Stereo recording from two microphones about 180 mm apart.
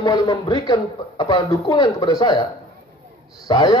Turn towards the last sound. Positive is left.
turn(degrees=25)  # may be behind; listen again after turning